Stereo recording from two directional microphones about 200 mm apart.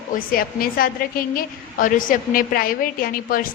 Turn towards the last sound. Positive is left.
turn(degrees=45)  # may be behind; listen again after turning